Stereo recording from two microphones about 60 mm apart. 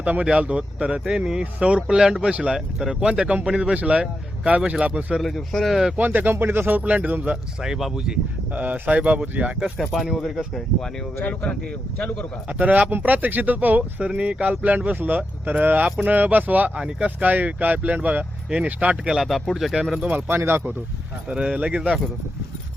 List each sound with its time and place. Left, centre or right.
0.0 s speech: right
2.6 s speech: centre
3.8 s speech: right
5.2 s speech: centre
6.0 s speech: right
7.6 s speech: centre
8.5 s speech: right
9.7 s speech: centre
11.9 s speech: left
12.5 s speech: right
19.0 s speech: centre
20.1 s speech: right
21.2 s speech: centre